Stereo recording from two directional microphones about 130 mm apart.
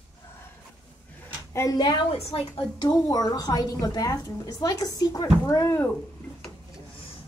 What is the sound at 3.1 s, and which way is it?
A woman's voice, 30° left (ahead or behind).